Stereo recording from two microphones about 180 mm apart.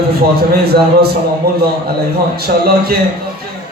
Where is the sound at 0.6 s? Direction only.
60° right (ahead or behind).